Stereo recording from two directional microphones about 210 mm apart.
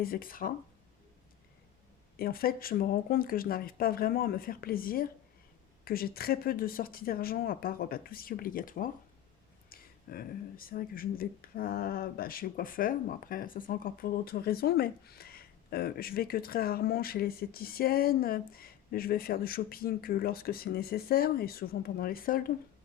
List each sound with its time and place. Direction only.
0.0 s speech: 45° left (ahead or behind)
2.1 s speech: 45° left (ahead or behind)